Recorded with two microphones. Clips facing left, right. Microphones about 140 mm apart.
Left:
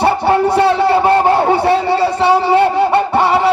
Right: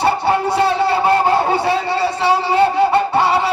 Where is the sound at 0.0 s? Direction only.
55° left (ahead or behind).